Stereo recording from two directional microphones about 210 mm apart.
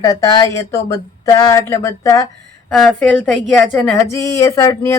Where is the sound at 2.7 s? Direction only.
Centre (ahead or behind).